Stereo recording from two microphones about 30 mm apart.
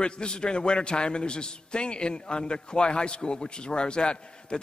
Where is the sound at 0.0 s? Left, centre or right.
Left.